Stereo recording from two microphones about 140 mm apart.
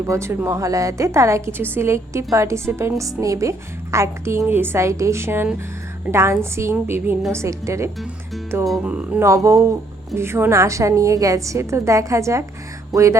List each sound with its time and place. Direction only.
0.1 s a woman's voice: 20° right (ahead or behind)
8.6 s speech: centre (ahead or behind)
8.9 s a woman's voice: 10° right (ahead or behind)
12.9 s music: 20° right (ahead or behind)